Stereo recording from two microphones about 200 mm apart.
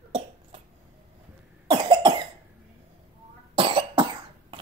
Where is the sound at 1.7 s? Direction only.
25° right (ahead or behind).